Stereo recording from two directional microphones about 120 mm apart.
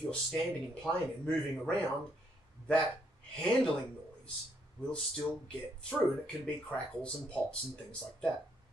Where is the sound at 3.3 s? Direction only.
5° left (ahead or behind).